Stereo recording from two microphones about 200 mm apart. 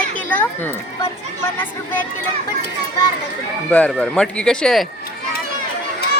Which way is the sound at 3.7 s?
5° left (ahead or behind).